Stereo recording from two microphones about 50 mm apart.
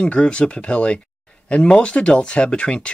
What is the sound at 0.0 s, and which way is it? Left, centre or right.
Speech, left.